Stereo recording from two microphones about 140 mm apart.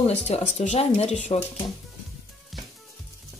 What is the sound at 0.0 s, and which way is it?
Speech, 50° left (ahead or behind).